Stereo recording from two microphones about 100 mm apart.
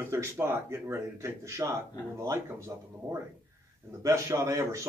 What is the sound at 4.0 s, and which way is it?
Speech, 30° right (ahead or behind).